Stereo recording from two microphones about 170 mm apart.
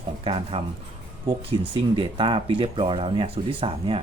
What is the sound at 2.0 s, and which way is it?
Speech, 30° right (ahead or behind).